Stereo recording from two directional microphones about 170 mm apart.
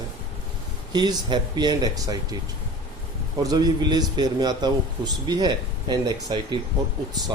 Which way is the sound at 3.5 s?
25° right (ahead or behind).